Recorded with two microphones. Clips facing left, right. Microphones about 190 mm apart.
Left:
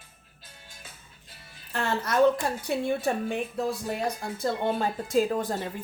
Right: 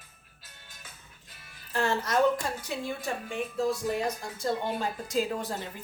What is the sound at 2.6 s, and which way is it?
Speech, 65° left (ahead or behind).